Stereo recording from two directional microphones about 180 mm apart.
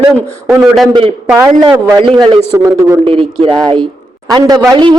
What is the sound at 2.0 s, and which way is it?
A man's voice, 25° right (ahead or behind).